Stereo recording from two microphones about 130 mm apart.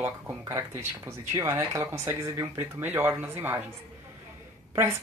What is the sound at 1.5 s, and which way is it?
Speech, 20° right (ahead or behind).